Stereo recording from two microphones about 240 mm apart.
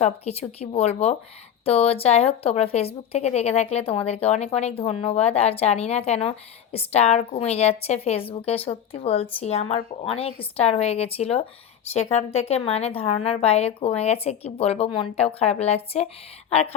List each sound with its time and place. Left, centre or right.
0.0 s speech: left